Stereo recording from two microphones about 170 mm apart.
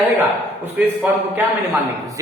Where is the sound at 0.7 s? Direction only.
10° right (ahead or behind).